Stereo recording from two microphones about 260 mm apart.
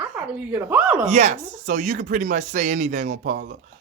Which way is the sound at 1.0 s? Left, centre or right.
Right.